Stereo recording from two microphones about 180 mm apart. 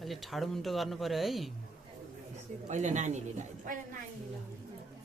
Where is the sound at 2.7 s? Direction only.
40° right (ahead or behind).